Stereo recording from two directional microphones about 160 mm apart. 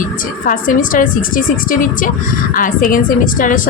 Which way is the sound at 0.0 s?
55° left (ahead or behind).